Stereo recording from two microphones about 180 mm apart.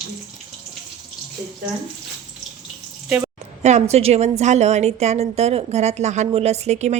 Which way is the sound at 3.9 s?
35° right (ahead or behind).